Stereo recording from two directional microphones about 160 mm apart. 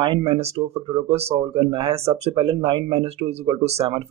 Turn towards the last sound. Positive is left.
turn(degrees=-40)  # may be behind; listen again after turning